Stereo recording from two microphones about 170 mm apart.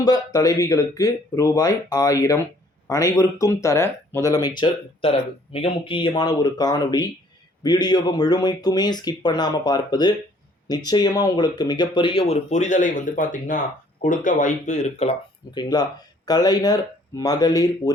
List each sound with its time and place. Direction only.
0.0 s speech: 20° left (ahead or behind); by 15.1 s 40° left (ahead or behind)
15.5 s speech: 25° left (ahead or behind)